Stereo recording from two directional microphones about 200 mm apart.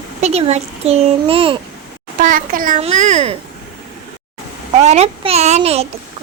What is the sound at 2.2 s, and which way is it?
A child's voice, 45° right (ahead or behind).